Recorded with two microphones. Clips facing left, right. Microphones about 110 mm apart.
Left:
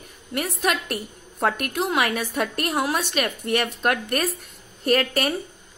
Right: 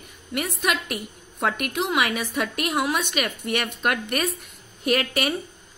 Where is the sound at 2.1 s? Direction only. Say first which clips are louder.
Left 1 dB; centre (ahead or behind).